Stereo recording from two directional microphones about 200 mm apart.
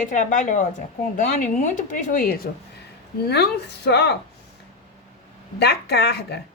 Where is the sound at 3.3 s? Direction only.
55° left (ahead or behind).